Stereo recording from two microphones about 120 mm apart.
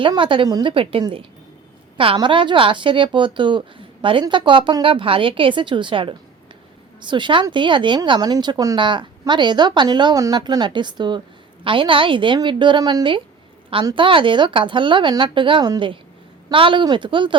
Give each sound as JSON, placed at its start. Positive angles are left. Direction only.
{"t": 0.2, "sound": "speech", "side_deg": -45}
{"t": 0.4, "sound": "a woman's voice", "side_deg": -35}
{"t": 0.7, "sound": "speech", "side_deg": -50}
{"t": 2.1, "sound": "a woman's voice", "side_deg": -45}